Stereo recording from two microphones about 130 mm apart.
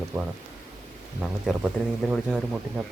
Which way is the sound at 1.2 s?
5° right (ahead or behind).